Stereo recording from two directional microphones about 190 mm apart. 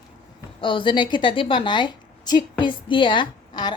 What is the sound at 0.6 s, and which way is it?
A woman's voice, 25° left (ahead or behind).